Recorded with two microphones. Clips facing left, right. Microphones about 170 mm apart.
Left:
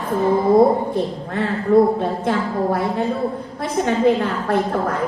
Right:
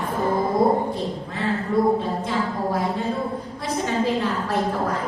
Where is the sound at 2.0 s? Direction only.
60° left (ahead or behind).